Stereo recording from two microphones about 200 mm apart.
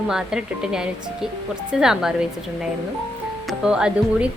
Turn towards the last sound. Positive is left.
turn(degrees=-5)  # may be behind; listen again after turning